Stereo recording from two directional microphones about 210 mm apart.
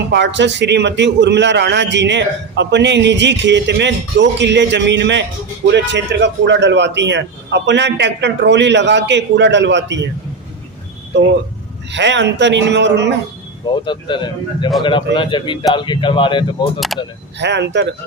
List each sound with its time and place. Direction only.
0.1 s a man's voice: 55° right (ahead or behind)
11.9 s a man's voice: 60° right (ahead or behind)
13.8 s speech: 20° left (ahead or behind)
17.4 s a man's voice: 55° right (ahead or behind)